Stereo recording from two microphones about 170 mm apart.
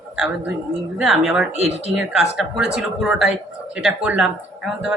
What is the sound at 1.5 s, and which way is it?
Speech, 40° right (ahead or behind).